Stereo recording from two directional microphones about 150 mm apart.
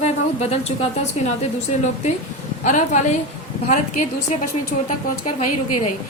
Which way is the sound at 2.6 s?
55° left (ahead or behind).